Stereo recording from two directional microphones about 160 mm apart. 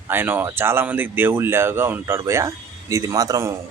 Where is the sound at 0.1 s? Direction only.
10° right (ahead or behind).